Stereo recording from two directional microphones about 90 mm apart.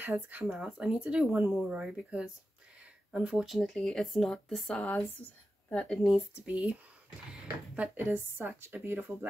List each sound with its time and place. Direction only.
0.0 s speech: 20° right (ahead or behind); by 5.9 s 15° left (ahead or behind)
6.4 s speech: 15° right (ahead or behind)